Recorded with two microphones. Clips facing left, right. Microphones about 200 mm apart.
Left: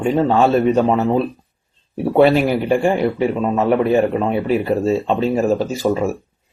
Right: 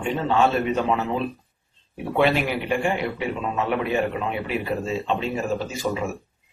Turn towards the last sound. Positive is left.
turn(degrees=35)  # may be behind; listen again after turning